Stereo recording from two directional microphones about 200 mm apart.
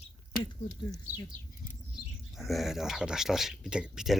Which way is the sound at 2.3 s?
Centre (ahead or behind).